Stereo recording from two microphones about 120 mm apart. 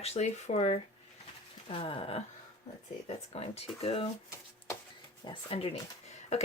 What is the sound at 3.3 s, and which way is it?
Speech, 55° left (ahead or behind).